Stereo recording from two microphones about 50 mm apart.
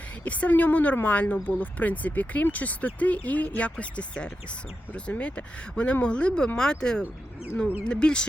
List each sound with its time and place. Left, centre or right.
0.3 s speech: left